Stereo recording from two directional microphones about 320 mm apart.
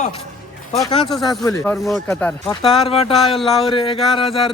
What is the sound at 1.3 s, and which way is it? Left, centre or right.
Speech, centre.